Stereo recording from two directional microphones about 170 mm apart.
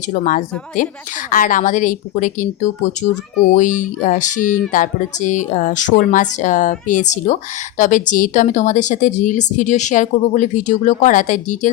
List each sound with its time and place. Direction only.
0.1 s a woman's voice: 50° left (ahead or behind)